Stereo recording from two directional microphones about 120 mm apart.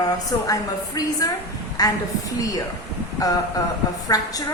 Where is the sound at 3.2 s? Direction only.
30° left (ahead or behind).